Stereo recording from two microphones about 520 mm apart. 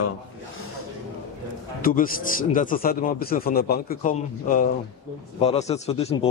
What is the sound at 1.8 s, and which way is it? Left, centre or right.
A man's voice, centre.